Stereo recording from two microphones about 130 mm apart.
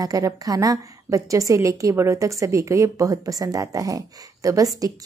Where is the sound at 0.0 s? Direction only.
25° right (ahead or behind).